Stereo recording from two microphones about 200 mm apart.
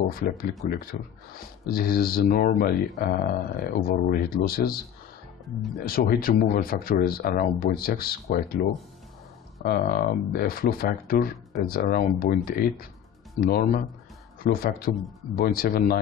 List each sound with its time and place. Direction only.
0.1 s speech: 45° left (ahead or behind)
5.9 s speech: 45° left (ahead or behind)